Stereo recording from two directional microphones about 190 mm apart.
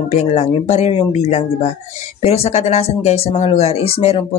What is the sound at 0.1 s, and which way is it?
Speech, 35° left (ahead or behind).